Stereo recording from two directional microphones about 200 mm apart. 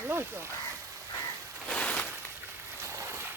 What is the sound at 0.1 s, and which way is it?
Speech, 10° right (ahead or behind).